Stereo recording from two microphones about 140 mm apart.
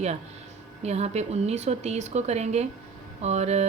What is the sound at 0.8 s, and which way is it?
Speech, 50° right (ahead or behind).